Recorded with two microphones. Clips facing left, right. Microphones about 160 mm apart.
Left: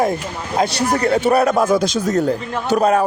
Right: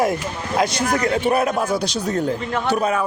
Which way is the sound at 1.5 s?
90° left.